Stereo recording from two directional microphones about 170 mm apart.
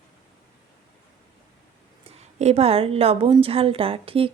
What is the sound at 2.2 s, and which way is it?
A woman's voice, 40° right (ahead or behind).